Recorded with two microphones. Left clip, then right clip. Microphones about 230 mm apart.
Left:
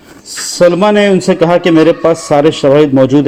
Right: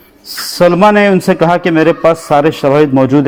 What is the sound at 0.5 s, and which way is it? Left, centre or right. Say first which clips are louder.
A man's voice: even; right.